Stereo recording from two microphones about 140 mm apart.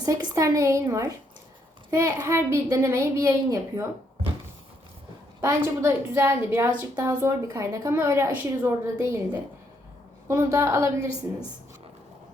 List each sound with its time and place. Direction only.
0.0 s a woman's voice: 25° right (ahead or behind)
5.4 s a woman's voice: 20° right (ahead or behind)
6.9 s a woman's voice: 25° right (ahead or behind)
10.2 s a woman's voice: 20° right (ahead or behind)